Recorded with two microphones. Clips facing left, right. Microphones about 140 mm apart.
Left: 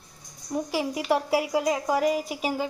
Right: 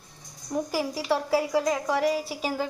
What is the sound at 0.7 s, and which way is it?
A woman's voice, 15° left (ahead or behind).